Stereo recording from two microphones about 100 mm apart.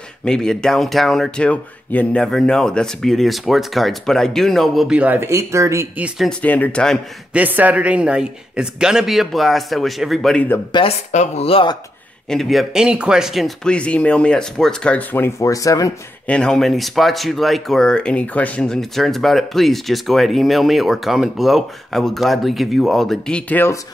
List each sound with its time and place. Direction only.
0.2 s speech: 5° left (ahead or behind)
4.9 s speech: 15° right (ahead or behind)
5.3 s speech: 30° right (ahead or behind)
6.4 s speech: 15° left (ahead or behind)
7.3 s speech: 15° right (ahead or behind); by 10.3 s centre (ahead or behind)
10.7 s speech: 75° left (ahead or behind)
12.3 s speech: centre (ahead or behind)
13.7 s speech: 10° left (ahead or behind); by 15.9 s 35° left (ahead or behind)
16.3 s speech: 10° left (ahead or behind)